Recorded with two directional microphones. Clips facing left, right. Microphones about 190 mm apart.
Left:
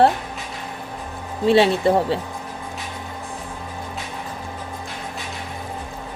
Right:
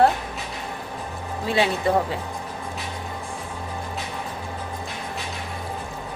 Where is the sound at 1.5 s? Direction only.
30° left (ahead or behind).